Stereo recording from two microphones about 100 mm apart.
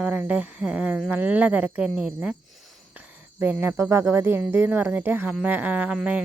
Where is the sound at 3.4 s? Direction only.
20° right (ahead or behind).